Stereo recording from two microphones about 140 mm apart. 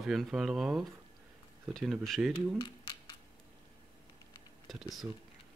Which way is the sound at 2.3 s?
30° left (ahead or behind).